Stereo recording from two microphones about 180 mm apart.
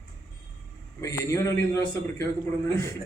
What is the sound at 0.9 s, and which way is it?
A man's voice, 15° left (ahead or behind).